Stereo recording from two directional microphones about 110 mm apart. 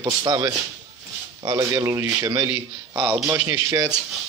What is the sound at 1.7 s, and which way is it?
Speech, 25° right (ahead or behind).